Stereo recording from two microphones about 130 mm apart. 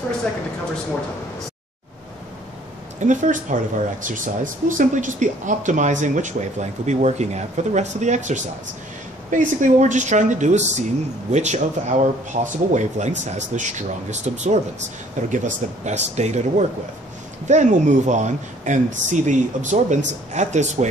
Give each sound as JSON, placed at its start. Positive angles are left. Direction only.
{"t": 3.0, "sound": "speech", "side_deg": -75}